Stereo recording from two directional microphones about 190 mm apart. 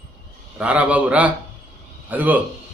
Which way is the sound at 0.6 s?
5° right (ahead or behind).